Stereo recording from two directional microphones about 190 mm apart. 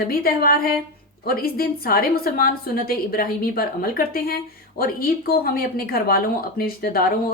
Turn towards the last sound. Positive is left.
turn(degrees=50)  # may be behind; listen again after turning